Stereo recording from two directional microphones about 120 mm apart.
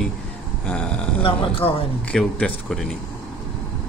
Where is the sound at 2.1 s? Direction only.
5° left (ahead or behind).